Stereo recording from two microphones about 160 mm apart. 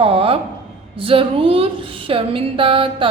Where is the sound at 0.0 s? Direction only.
35° right (ahead or behind).